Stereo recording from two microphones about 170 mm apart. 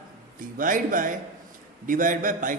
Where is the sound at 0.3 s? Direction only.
55° right (ahead or behind).